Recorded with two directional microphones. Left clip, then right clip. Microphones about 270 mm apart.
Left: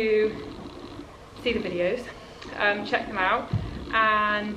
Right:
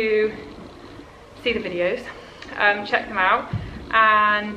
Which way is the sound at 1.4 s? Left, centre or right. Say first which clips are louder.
Right 3 dB; centre.